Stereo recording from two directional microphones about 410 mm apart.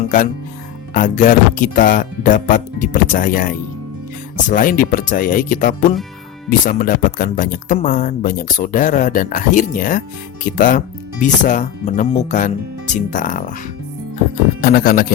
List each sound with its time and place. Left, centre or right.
0.9 s speech: centre
14.6 s speech: left